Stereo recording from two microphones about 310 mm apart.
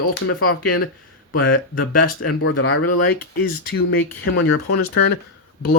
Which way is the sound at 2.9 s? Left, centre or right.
Left.